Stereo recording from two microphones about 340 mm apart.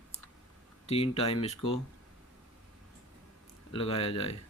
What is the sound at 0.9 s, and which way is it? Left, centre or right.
Speech, centre.